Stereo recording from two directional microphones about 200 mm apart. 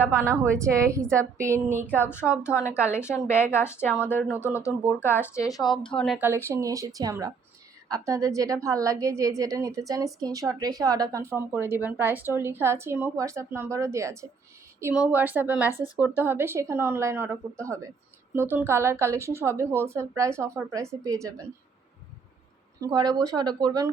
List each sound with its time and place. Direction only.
0.0 s speech: 10° right (ahead or behind)
1.9 s a woman's voice: 10° left (ahead or behind)
5.9 s speech: 5° left (ahead or behind)
6.1 s speech: 10° right (ahead or behind)
22.8 s speech: 20° right (ahead or behind)